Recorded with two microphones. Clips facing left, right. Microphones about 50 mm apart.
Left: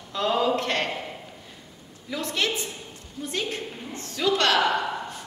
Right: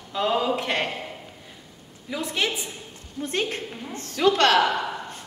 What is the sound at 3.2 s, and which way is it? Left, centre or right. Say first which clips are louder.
A woman's voice: right 3 dB; right.